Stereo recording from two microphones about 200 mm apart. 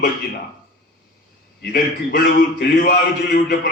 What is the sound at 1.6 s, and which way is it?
A man's voice, 50° left (ahead or behind).